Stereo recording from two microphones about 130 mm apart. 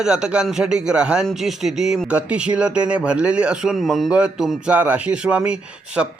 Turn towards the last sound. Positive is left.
turn(degrees=-10)  # may be behind; listen again after turning